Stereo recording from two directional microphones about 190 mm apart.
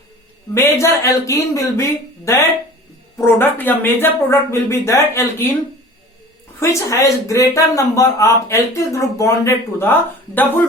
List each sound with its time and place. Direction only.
0.5 s speech: 15° left (ahead or behind)
6.6 s speech: 15° left (ahead or behind)